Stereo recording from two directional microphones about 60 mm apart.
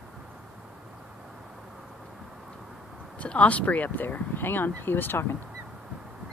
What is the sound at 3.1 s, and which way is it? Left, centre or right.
Speech, left.